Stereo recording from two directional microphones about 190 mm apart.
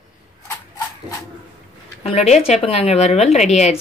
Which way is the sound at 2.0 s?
35° left (ahead or behind).